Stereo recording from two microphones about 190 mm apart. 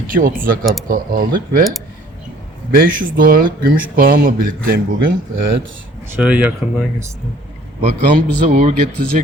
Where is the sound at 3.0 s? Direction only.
50° right (ahead or behind).